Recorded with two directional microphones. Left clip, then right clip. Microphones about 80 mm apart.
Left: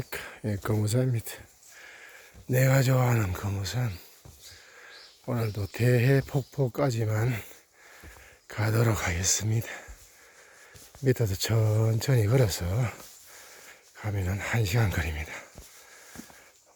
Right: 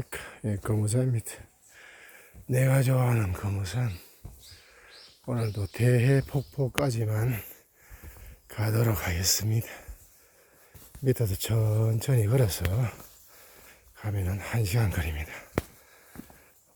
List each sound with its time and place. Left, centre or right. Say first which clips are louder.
0.0 s a sound: left 1 dB; centre
2.6 s speech: left 2 dB; left
3.4 s speech: left 1 dB; centre
4.8 s a sound: left 3 dB; left
5.5 s speech: left 1 dB; centre
6.8 s speech: left 2 dB; left
8.0 s a sound: left 4 dB; left
9.0 s speech: even; centre
9.5 s speech: left 2 dB; centre
11.0 s speech: left 2 dB; centre
13.7 s a sound: left 2 dB; centre
14.3 s speech: left 4 dB; left; by 15.4 s centre